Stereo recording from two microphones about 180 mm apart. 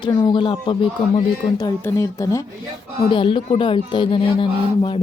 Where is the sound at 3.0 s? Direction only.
30° left (ahead or behind).